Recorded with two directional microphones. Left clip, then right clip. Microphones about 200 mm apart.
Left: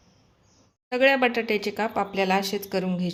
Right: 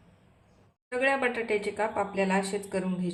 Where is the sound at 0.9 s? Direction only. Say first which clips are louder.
Left 6 dB; 45° left (ahead or behind).